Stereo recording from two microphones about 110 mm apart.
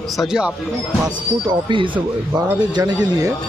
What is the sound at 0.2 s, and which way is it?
Speech, 5° right (ahead or behind).